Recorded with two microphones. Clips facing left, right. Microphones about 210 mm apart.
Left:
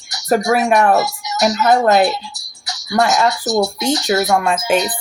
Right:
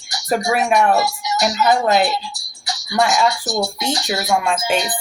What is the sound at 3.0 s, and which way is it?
Speech, centre (ahead or behind).